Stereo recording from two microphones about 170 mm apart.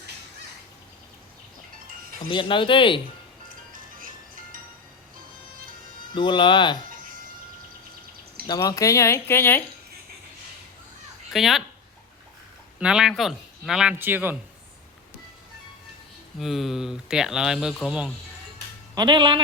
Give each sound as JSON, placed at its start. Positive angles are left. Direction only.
{"t": 2.1, "sound": "speech", "side_deg": 30}
{"t": 3.5, "sound": "music", "side_deg": -55}
{"t": 6.1, "sound": "speech", "side_deg": 30}
{"t": 8.4, "sound": "speech", "side_deg": 20}
{"t": 11.3, "sound": "speech", "side_deg": 0}
{"t": 12.8, "sound": "speech", "side_deg": -5}
{"t": 16.4, "sound": "speech", "side_deg": 0}
{"t": 18.9, "sound": "speech", "side_deg": -25}